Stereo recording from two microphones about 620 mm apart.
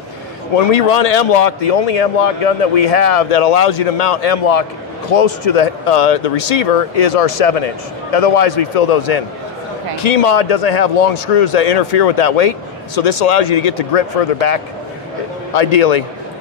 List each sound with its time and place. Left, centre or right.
0.6 s a man's voice: left
7.2 s a man's voice: left
15.6 s a man's voice: left